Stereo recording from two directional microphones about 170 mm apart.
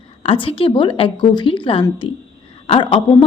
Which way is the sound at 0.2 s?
30° left (ahead or behind).